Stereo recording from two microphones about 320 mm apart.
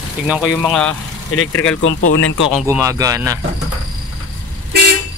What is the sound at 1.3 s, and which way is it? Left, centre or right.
Speech, left.